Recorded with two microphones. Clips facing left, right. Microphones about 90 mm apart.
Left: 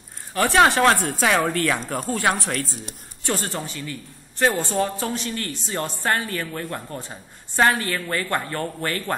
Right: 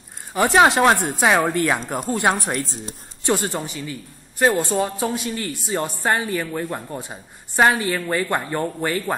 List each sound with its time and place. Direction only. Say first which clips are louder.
0.3 s a man's voice: right 2 dB; 15° right (ahead or behind)